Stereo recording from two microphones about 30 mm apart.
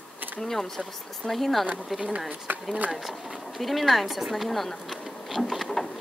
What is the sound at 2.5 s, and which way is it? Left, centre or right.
Speech, right.